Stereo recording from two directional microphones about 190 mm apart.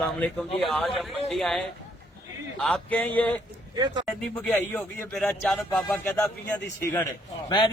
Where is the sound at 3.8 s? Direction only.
25° right (ahead or behind).